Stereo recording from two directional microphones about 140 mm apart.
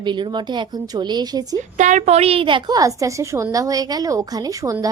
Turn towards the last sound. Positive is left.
turn(degrees=-25)  # may be behind; listen again after turning